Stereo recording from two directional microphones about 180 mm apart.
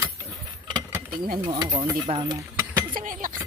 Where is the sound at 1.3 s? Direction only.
25° right (ahead or behind).